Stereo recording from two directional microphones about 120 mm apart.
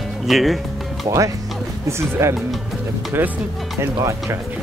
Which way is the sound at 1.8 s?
20° right (ahead or behind).